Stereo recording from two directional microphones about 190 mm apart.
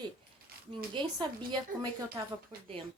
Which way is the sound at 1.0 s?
25° right (ahead or behind).